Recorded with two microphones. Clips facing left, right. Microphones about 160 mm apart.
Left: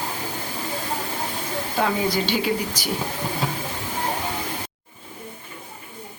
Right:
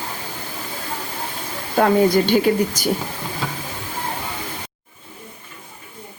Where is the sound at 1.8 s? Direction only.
50° right (ahead or behind).